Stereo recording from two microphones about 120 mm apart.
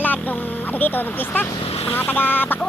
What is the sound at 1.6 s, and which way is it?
Speech, 55° left (ahead or behind).